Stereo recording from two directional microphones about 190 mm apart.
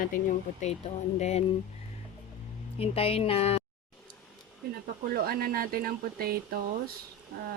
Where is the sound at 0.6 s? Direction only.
35° left (ahead or behind).